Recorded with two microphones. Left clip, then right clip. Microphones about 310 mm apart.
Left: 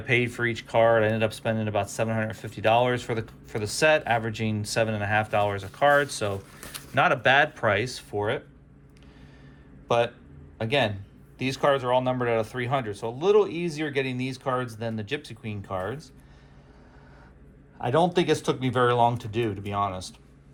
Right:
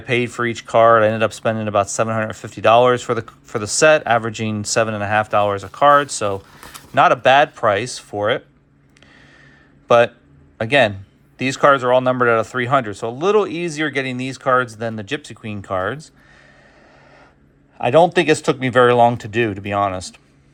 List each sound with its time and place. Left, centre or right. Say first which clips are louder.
0.0 s speech: right 5 dB; centre
10.6 s speech: right 10 dB; right
17.7 s speech: right 10 dB; right